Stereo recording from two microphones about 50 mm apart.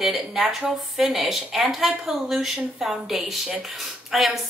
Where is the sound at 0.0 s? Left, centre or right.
Centre.